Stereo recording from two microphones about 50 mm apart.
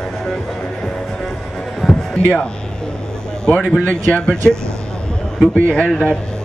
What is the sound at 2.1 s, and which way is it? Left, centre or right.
Speech, left.